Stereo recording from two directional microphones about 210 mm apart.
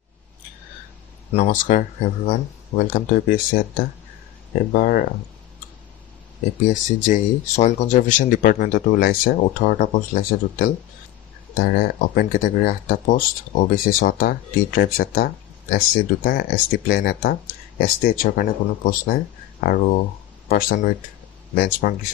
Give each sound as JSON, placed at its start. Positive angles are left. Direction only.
{"t": 1.3, "sound": "speech", "side_deg": 35}
{"t": 6.6, "sound": "speech", "side_deg": 35}